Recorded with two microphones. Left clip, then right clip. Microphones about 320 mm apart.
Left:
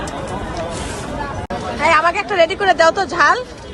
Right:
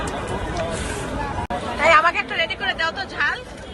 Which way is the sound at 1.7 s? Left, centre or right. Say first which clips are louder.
Left 1 dB; centre.